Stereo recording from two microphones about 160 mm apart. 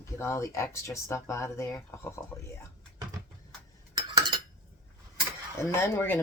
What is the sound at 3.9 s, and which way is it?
Cutlery, 30° right (ahead or behind).